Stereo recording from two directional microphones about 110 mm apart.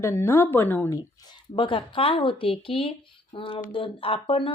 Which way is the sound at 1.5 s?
50° left (ahead or behind).